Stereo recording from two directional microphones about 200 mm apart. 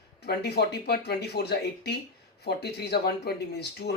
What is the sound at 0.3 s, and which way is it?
Speech, 55° left (ahead or behind).